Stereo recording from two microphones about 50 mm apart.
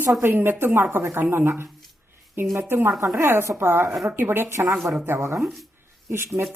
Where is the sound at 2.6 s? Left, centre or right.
Right.